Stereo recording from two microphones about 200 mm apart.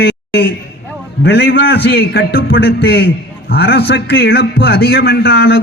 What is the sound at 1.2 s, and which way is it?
A man's voice, 60° left (ahead or behind).